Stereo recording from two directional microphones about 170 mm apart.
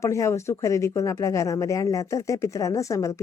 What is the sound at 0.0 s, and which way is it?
A woman's voice, 15° left (ahead or behind).